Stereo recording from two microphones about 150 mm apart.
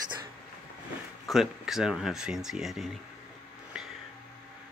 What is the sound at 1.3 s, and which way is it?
Speech, centre (ahead or behind).